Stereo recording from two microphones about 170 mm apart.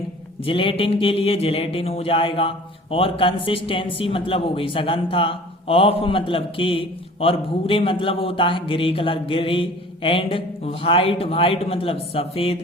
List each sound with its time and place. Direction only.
0.4 s a man's voice: 30° left (ahead or behind)